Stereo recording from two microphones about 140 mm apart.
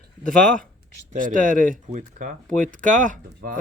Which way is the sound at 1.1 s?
75° right (ahead or behind).